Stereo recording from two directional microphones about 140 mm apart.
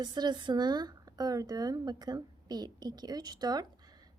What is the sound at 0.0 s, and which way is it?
A woman's voice, 30° right (ahead or behind).